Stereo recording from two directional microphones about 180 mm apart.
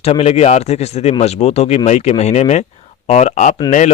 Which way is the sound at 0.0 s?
35° left (ahead or behind).